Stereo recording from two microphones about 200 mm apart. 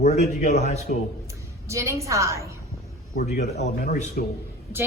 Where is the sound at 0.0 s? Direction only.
35° left (ahead or behind).